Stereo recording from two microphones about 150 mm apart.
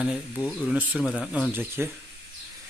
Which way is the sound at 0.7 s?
5° right (ahead or behind).